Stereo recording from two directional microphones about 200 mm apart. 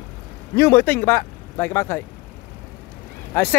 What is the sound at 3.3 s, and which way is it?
Speech, 10° left (ahead or behind).